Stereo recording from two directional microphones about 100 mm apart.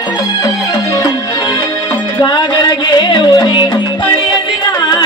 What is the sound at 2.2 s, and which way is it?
Music, 45° left (ahead or behind).